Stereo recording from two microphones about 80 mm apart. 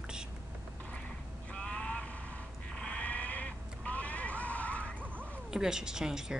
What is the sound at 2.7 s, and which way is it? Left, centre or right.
Sheep, centre.